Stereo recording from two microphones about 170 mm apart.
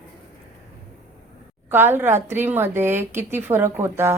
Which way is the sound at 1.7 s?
15° right (ahead or behind).